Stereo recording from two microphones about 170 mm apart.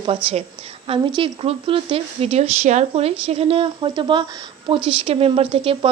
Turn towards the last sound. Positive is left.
turn(degrees=-30)  # may be behind; listen again after turning